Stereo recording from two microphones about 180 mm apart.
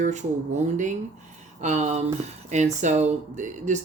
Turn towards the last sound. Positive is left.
turn(degrees=-45)  # may be behind; listen again after turning